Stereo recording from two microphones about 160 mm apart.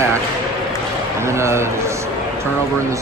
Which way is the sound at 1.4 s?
15° right (ahead or behind).